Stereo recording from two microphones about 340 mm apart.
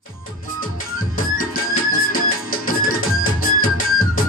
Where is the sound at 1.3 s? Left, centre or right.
Left.